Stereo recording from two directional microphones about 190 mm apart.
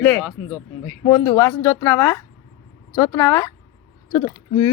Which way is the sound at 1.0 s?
15° left (ahead or behind).